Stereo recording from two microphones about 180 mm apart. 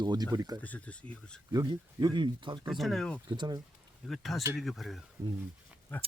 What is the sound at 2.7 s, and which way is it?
Speech, centre (ahead or behind).